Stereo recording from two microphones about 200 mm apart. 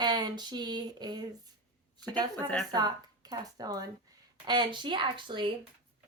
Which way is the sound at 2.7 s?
20° right (ahead or behind).